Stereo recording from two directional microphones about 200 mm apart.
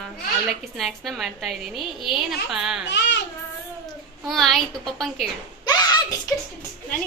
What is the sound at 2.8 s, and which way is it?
Speech, 60° left (ahead or behind).